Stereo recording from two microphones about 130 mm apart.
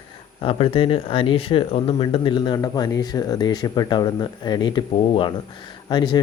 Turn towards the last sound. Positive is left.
turn(degrees=35)  # may be behind; listen again after turning